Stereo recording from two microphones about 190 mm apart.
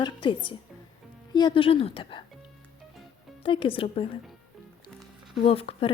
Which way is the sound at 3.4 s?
25° left (ahead or behind).